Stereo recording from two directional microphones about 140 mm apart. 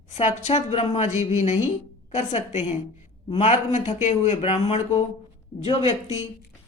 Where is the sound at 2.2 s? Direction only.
50° left (ahead or behind).